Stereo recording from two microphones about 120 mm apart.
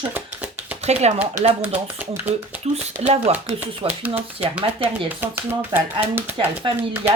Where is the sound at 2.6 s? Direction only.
65° right (ahead or behind).